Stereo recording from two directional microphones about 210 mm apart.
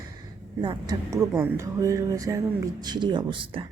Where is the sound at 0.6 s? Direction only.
20° right (ahead or behind).